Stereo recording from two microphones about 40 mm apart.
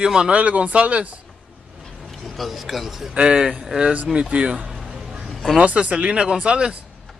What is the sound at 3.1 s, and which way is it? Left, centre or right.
Speech, right.